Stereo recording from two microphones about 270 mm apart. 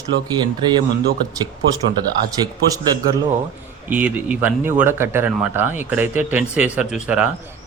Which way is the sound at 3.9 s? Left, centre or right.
Centre.